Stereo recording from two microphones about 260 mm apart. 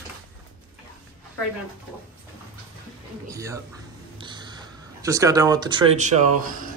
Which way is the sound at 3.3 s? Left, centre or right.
Centre.